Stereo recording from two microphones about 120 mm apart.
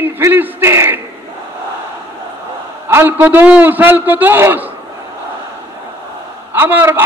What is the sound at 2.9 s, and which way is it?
A man's voice, 20° right (ahead or behind).